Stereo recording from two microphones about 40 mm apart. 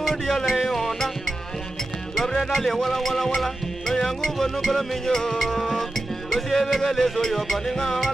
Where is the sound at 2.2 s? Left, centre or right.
Centre.